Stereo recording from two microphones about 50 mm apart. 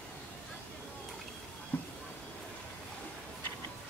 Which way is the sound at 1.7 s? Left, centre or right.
Left.